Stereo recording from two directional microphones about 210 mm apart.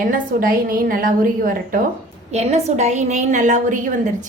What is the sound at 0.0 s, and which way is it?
A woman's voice, 40° right (ahead or behind).